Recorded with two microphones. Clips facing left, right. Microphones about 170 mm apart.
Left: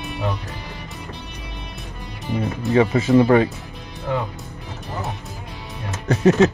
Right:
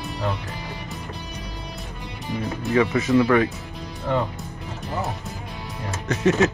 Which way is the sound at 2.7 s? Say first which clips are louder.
Left 3 dB; 30° left (ahead or behind).